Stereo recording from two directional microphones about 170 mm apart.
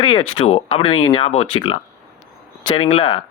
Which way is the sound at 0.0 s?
30° left (ahead or behind).